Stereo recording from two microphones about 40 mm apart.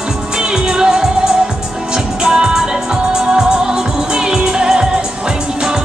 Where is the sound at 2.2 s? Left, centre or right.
Centre.